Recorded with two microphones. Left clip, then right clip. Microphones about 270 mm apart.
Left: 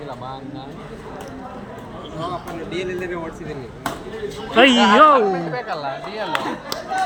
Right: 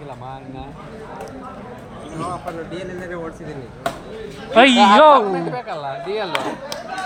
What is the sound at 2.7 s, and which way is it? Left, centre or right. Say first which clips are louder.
Speech: left 4 dB; right.